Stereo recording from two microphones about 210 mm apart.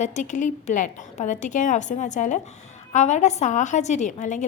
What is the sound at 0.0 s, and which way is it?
A woman's voice, 35° left (ahead or behind).